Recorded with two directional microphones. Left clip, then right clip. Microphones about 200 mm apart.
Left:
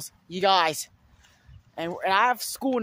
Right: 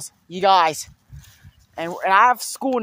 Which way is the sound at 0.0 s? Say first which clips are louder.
Right 5 dB; 15° right (ahead or behind).